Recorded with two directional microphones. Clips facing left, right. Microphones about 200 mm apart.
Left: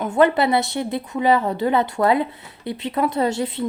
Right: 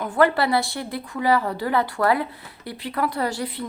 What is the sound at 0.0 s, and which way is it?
A woman's voice, 20° left (ahead or behind).